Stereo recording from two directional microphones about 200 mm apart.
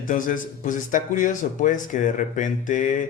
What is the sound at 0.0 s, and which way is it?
Speech, 40° left (ahead or behind).